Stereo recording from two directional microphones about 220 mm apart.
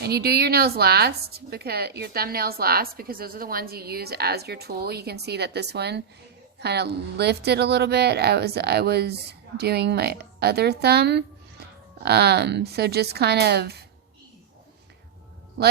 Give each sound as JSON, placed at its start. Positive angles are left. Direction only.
{"t": 0.0, "sound": "a woman's voice", "side_deg": -45}